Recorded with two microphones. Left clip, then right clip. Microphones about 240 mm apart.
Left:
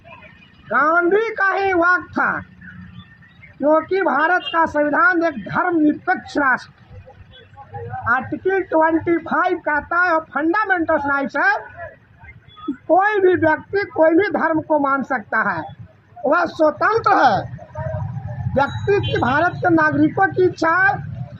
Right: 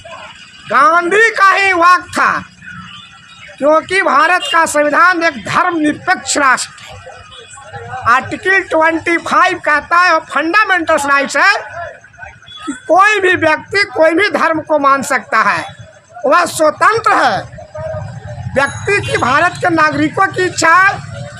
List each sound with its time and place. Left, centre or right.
0.7 s speech: right
3.6 s speech: right
8.0 s speech: right
12.9 s speech: right
16.9 s speech: centre
19.1 s speech: right